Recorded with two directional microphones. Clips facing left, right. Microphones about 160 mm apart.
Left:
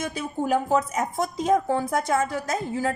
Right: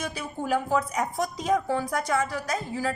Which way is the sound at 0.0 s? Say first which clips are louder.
Left 4 dB; 20° left (ahead or behind).